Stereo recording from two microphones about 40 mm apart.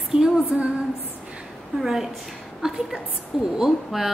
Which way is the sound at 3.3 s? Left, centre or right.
Centre.